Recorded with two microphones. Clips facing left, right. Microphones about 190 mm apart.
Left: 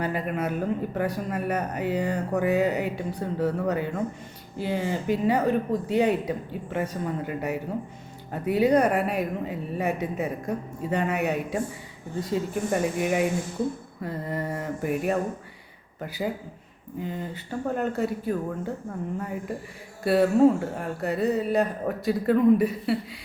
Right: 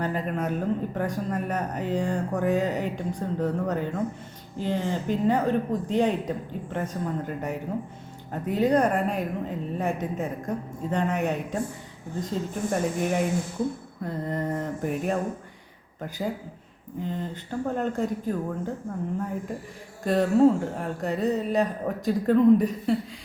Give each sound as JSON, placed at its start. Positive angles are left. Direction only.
{"t": 0.0, "sound": "speech", "side_deg": 10}
{"t": 20.1, "sound": "speech", "side_deg": 5}